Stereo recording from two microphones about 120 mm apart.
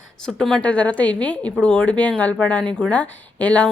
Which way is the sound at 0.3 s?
5° left (ahead or behind).